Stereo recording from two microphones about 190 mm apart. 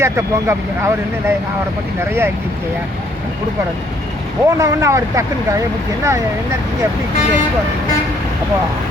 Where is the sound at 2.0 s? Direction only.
10° right (ahead or behind).